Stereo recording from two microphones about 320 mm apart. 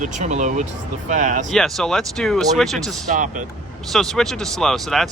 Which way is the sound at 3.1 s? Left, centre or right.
Right.